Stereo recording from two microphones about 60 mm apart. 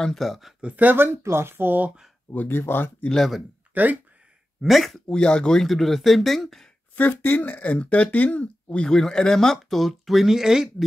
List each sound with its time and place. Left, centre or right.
0.0 s speech: centre
0.6 s speech: right
2.3 s speech: left
3.1 s speech: centre
3.7 s speech: right
4.6 s speech: centre
5.0 s speech: centre
7.0 s speech: left; by 10.7 s centre